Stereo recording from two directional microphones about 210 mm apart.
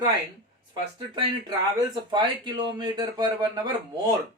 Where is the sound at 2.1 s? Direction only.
20° right (ahead or behind).